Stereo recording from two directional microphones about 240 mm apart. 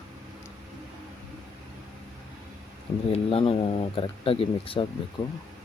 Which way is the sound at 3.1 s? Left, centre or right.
Left.